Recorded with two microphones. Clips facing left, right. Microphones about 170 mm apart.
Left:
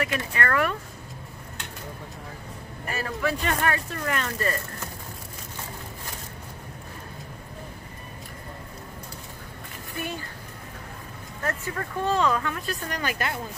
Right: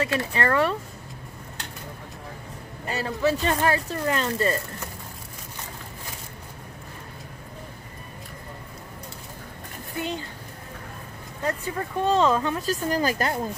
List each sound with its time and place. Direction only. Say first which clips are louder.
0.3 s speech: right 2 dB; 30° right (ahead or behind)
2.9 s speech: right 4 dB; 25° right (ahead or behind)
9.9 s speech: right 3 dB; 20° right (ahead or behind)
11.4 s speech: right 2 dB; 15° right (ahead or behind)
12.8 s speech: right 6 dB; 35° right (ahead or behind)